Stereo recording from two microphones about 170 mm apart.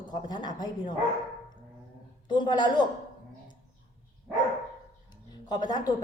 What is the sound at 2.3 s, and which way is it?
Speech, 25° left (ahead or behind).